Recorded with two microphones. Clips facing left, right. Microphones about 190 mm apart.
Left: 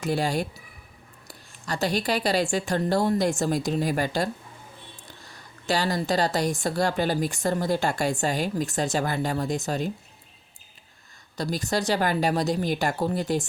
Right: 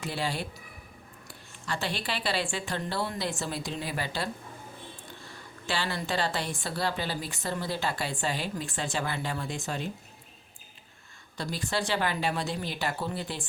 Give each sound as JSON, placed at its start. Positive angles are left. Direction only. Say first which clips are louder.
{"t": 0.0, "sound": "a woman's voice", "louder": "left 7 dB", "side_deg": 45}
{"t": 5.3, "sound": "a woman's voice", "louder": "left 7 dB", "side_deg": 40}
{"t": 11.3, "sound": "speech", "louder": "left 5 dB", "side_deg": 40}